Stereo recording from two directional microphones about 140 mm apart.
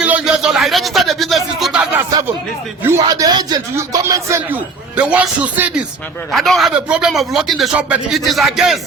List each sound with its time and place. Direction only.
0.0 s a sound: 10° right (ahead or behind)
2.0 s a man's voice: 25° right (ahead or behind)
4.4 s a man's voice: 10° right (ahead or behind)